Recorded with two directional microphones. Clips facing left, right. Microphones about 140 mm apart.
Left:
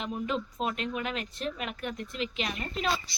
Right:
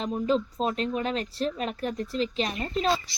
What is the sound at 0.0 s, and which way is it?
Speech, 30° right (ahead or behind).